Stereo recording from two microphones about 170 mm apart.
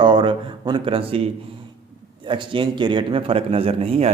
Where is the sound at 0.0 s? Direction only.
25° right (ahead or behind).